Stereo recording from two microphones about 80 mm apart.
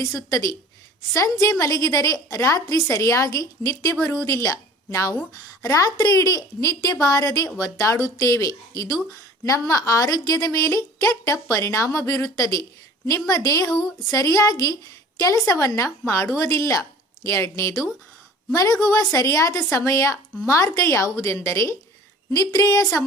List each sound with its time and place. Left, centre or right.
0.0 s a woman's voice: left
4.0 s a woman's voice: left
13.7 s a woman's voice: centre
14.1 s a woman's voice: left
22.3 s a woman's voice: left